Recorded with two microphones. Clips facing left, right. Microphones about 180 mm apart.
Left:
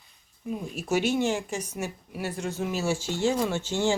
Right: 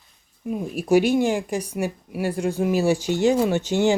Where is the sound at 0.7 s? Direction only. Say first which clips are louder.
Right 8 dB; 10° right (ahead or behind).